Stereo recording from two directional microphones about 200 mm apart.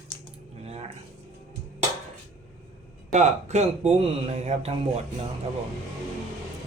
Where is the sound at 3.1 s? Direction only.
35° right (ahead or behind).